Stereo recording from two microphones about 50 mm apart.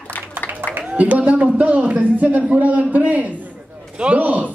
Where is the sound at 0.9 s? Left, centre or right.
Right.